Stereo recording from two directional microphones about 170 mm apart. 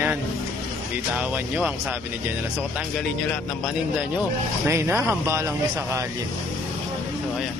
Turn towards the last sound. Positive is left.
turn(degrees=-15)  # may be behind; listen again after turning